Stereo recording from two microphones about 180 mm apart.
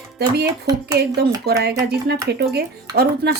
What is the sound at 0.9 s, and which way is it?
Speech, 65° right (ahead or behind).